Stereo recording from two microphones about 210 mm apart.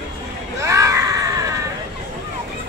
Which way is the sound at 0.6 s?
15° right (ahead or behind).